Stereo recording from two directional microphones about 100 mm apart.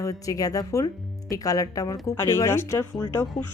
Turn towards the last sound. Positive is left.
turn(degrees=40)  # may be behind; listen again after turning